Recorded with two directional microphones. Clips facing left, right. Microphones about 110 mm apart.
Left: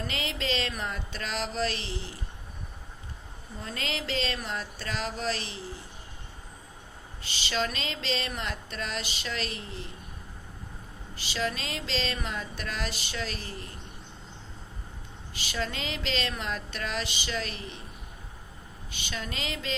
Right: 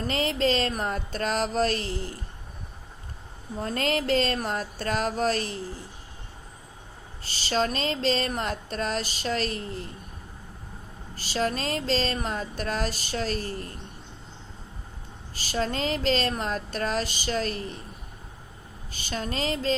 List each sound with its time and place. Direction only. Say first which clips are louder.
0.0 s a sound: right 8 dB; 40° right (ahead or behind)
3.6 s a sound: right 8 dB; 45° right (ahead or behind)
7.3 s speech: right 5 dB; 40° right (ahead or behind)
11.2 s speech: right 5 dB; 40° right (ahead or behind)
15.4 s speech: right 6 dB; 40° right (ahead or behind)
18.9 s speech: right 5 dB; 40° right (ahead or behind)